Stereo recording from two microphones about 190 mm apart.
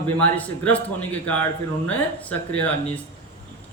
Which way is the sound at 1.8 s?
10° left (ahead or behind).